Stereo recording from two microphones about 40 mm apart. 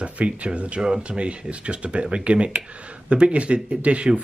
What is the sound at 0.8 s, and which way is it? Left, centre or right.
Speech, centre.